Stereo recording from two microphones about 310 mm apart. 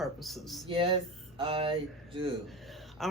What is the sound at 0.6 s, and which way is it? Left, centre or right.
Speech, centre.